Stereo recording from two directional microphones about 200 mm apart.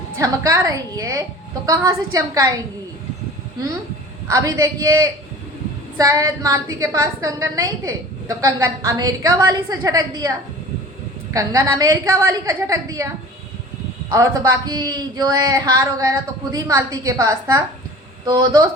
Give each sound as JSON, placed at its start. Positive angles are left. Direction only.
{"t": 0.2, "sound": "speech", "side_deg": -15}
{"t": 4.3, "sound": "speech", "side_deg": -15}
{"t": 11.3, "sound": "speech", "side_deg": -15}
{"t": 14.7, "sound": "speech", "side_deg": -20}